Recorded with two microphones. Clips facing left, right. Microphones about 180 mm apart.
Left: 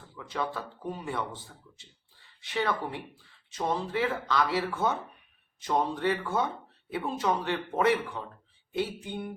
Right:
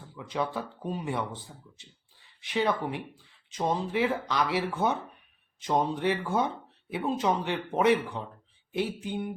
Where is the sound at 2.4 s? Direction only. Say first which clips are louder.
Right 2 dB; 20° right (ahead or behind).